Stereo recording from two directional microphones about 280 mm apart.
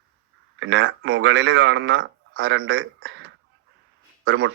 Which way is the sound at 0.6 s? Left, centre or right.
Right.